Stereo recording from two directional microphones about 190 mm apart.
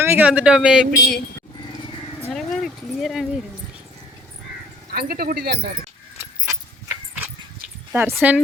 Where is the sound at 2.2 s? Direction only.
Centre (ahead or behind).